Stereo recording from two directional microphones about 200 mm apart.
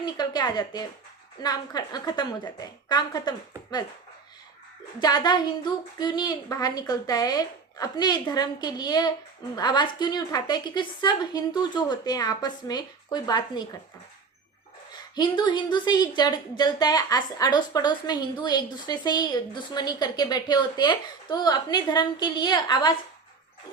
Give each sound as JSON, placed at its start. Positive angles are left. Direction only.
{"t": 0.0, "sound": "a woman's voice", "side_deg": 20}
{"t": 4.9, "sound": "speech", "side_deg": 20}
{"t": 15.1, "sound": "speech", "side_deg": 20}